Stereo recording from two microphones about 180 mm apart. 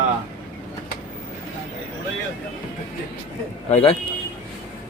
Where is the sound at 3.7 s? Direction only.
40° left (ahead or behind).